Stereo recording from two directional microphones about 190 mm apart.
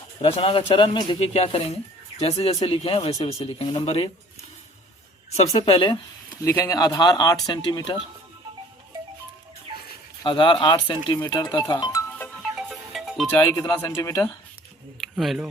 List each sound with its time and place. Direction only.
0.2 s speech: 30° left (ahead or behind)
6.4 s speech: 15° left (ahead or behind)
10.2 s speech: 25° left (ahead or behind)
12.1 s music: 5° left (ahead or behind)
13.3 s speech: 15° left (ahead or behind)
15.0 s speech: centre (ahead or behind)